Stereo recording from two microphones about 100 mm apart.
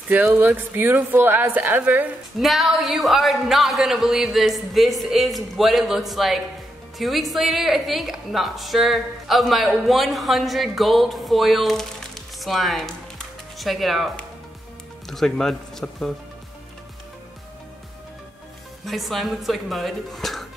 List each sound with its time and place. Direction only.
0.1 s a woman's voice: 20° right (ahead or behind)
2.4 s a woman's voice: centre (ahead or behind)
18.9 s a woman's voice: centre (ahead or behind)